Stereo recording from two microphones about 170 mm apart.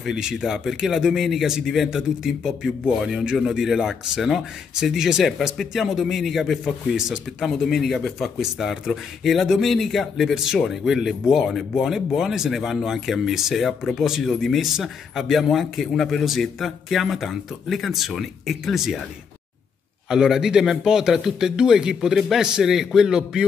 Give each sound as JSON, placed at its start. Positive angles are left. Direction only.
{"t": 0.0, "sound": "a man's voice", "side_deg": 0}
{"t": 20.1, "sound": "a man's voice", "side_deg": -5}